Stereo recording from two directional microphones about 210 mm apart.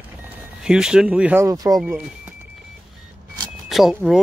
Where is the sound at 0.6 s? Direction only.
5° right (ahead or behind).